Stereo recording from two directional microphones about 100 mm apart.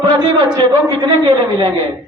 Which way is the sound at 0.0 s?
45° right (ahead or behind).